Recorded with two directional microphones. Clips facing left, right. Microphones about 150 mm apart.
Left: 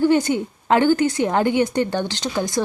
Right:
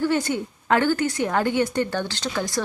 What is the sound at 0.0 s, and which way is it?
A woman's voice, 20° left (ahead or behind).